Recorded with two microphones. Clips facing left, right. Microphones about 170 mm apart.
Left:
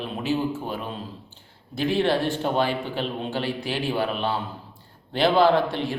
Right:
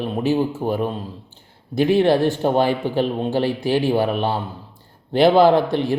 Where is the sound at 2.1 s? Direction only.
40° right (ahead or behind).